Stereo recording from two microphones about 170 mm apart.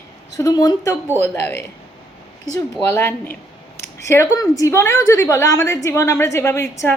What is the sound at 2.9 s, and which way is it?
A woman's voice, 15° left (ahead or behind).